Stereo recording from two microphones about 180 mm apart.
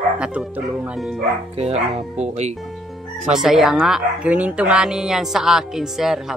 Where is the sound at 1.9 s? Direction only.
40° right (ahead or behind).